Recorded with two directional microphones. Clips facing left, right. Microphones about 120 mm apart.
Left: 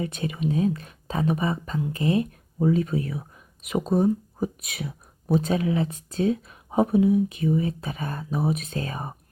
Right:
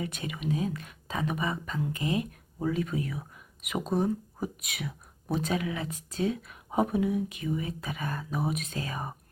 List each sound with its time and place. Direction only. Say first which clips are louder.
0.0 s speech: left 6 dB; 30° left (ahead or behind)
3.9 s speech: left 6 dB; 10° left (ahead or behind)
4.6 s speech: left 3 dB; 30° left (ahead or behind)